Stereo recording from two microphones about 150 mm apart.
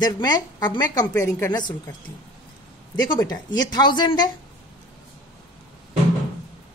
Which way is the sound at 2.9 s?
30° left (ahead or behind).